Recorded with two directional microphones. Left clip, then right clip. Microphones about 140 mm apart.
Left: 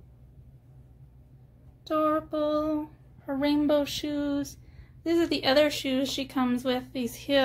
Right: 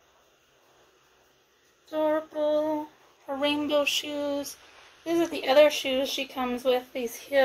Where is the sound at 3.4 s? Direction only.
90° left.